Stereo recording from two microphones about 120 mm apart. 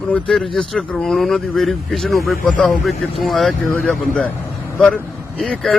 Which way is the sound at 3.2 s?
Centre (ahead or behind).